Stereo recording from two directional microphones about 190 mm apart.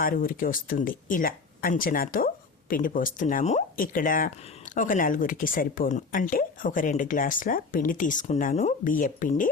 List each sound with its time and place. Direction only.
0.0 s speech: 50° left (ahead or behind)